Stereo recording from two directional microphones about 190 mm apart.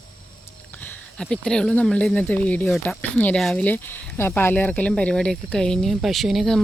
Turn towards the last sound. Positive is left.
turn(degrees=0)  # may be behind; listen again after turning